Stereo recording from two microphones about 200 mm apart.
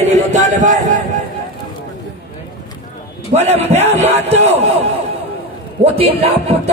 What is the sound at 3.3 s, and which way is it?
Music, 35° right (ahead or behind).